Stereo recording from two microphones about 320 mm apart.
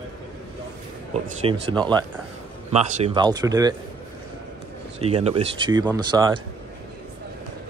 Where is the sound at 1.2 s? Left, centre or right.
Centre.